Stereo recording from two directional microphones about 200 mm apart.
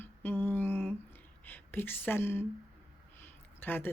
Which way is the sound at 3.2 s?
10° left (ahead or behind).